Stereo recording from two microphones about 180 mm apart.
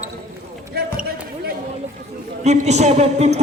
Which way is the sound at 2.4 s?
40° right (ahead or behind).